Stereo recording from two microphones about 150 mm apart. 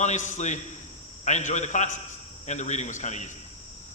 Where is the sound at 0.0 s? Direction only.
55° left (ahead or behind).